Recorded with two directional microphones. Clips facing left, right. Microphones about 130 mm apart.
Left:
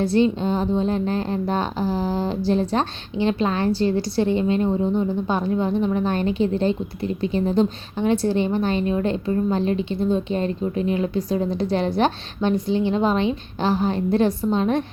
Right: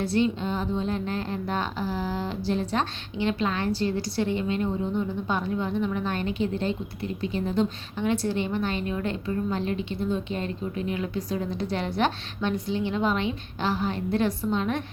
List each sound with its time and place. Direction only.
0.0 s a woman's voice: 30° left (ahead or behind)